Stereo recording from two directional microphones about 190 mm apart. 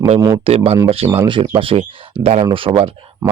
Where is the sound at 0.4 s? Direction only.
30° right (ahead or behind).